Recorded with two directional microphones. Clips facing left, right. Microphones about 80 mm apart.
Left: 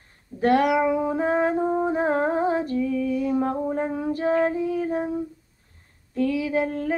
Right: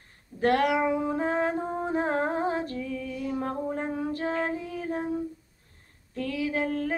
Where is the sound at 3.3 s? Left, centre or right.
Centre.